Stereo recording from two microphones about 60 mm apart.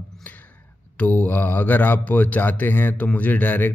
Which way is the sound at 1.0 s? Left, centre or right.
Left.